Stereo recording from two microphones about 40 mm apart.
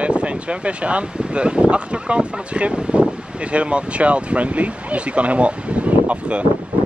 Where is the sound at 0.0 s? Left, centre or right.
Right.